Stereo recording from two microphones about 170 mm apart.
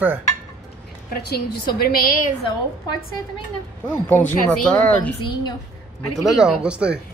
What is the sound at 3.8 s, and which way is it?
Speech, 10° left (ahead or behind).